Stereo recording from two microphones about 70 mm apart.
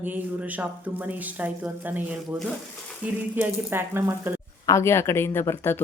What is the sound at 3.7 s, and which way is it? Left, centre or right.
Speech, right.